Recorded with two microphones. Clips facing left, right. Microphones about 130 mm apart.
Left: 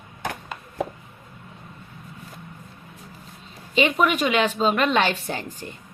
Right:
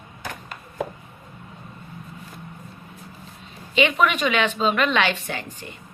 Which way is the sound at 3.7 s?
40° left (ahead or behind).